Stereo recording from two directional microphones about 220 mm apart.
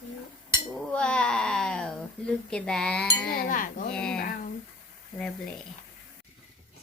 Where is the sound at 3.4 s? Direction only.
35° left (ahead or behind).